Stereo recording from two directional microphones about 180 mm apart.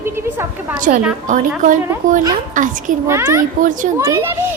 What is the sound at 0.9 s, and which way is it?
Speech, 45° right (ahead or behind).